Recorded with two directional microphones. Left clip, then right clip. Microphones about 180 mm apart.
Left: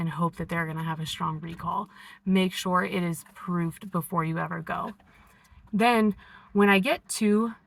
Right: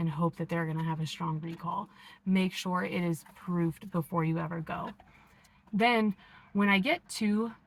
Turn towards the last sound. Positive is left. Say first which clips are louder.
# left 7 dB
turn(degrees=25)  # may be behind; listen again after turning